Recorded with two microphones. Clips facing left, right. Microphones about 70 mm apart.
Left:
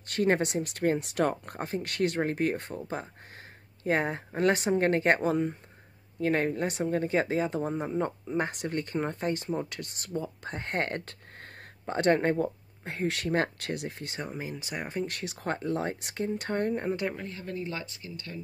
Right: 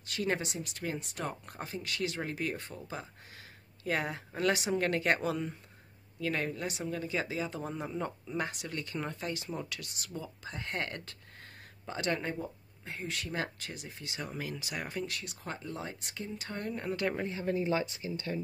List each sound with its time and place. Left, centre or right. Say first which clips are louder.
0.0 s speech: left 7 dB; left
3.8 s speech: left 6 dB; left
14.3 s speech: left 2 dB; left
15.0 s speech: left 7 dB; left
17.1 s speech: right 4 dB; centre